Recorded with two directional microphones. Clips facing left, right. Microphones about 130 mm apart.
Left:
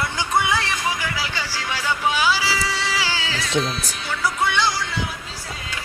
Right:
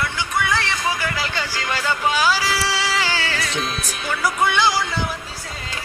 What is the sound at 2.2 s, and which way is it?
Music, 45° right (ahead or behind).